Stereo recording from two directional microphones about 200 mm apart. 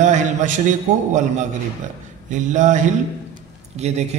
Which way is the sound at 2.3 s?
40° right (ahead or behind).